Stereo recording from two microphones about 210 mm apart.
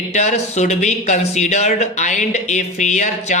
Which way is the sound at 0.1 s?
35° left (ahead or behind).